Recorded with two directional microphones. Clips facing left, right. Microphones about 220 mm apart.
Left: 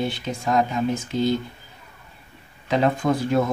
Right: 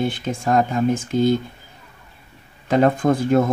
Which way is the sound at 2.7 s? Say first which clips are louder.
Right 4 dB; 50° right (ahead or behind).